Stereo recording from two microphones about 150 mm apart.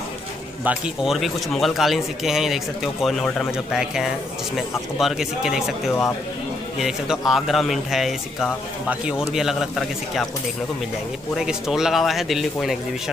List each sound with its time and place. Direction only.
0.7 s a man's voice: 5° right (ahead or behind)
11.3 s a man's voice: 5° right (ahead or behind)